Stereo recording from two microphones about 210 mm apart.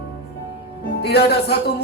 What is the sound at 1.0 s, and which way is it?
Speech, 50° left (ahead or behind).